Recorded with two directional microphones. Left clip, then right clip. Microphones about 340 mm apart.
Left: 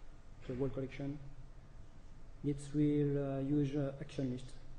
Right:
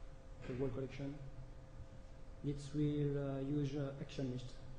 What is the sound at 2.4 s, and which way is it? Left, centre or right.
Speech, left.